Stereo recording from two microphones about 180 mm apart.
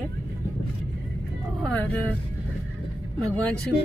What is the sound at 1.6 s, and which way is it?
Speech, 5° left (ahead or behind).